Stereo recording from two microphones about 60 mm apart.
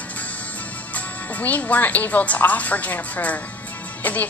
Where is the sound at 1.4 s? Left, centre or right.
Left.